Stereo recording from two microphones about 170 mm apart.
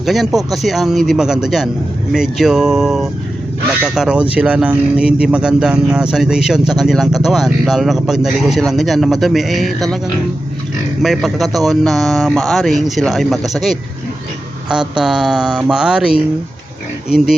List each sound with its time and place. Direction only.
0.0 s speech: centre (ahead or behind)
11.0 s speech: centre (ahead or behind)